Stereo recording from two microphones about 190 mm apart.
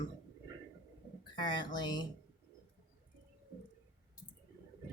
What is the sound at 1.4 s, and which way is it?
Speech, 25° left (ahead or behind).